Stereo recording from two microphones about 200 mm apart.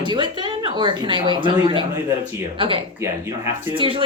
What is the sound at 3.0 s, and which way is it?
Speech, 15° right (ahead or behind).